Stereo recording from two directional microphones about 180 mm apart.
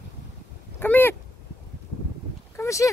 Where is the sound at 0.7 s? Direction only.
10° left (ahead or behind).